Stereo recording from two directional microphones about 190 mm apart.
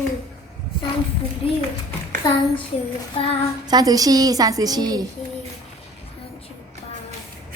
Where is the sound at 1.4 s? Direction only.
30° left (ahead or behind).